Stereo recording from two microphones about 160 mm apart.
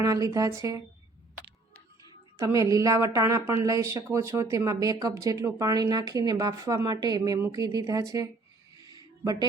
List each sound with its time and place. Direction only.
0.0 s speech: 20° right (ahead or behind)
2.4 s speech: 20° right (ahead or behind)
8.8 s a sound: 25° right (ahead or behind)